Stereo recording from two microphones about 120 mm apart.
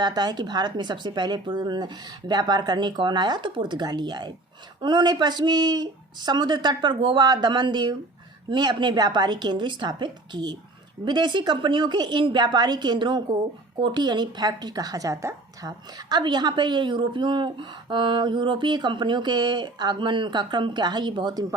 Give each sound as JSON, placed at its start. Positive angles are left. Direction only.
{"t": 0.0, "sound": "a woman's voice", "side_deg": -35}